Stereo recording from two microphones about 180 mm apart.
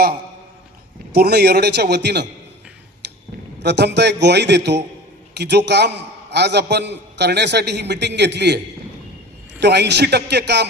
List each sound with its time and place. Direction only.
1.1 s a man's voice: 60° right (ahead or behind)
3.6 s a man's voice: 70° right (ahead or behind)